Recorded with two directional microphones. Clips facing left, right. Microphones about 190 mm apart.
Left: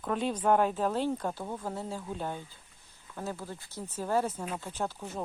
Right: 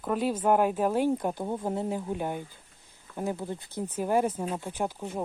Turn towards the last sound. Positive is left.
turn(degrees=-15)  # may be behind; listen again after turning